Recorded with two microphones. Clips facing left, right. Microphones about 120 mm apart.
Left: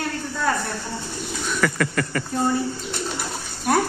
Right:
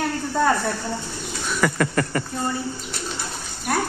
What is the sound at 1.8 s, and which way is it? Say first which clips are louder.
Speech: right 2 dB; 25° right (ahead or behind).